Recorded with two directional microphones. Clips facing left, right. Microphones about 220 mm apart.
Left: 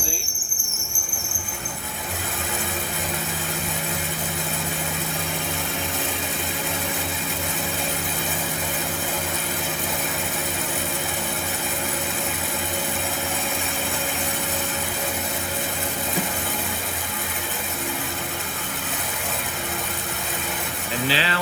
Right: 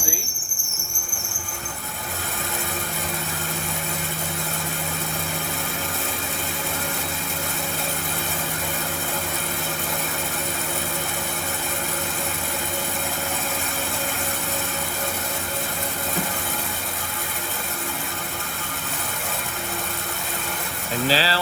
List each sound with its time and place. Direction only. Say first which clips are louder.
21.1 s vehicle: right 3 dB; 35° right (ahead or behind)